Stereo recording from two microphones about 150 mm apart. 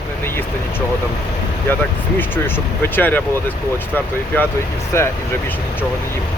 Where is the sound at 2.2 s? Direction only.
15° left (ahead or behind).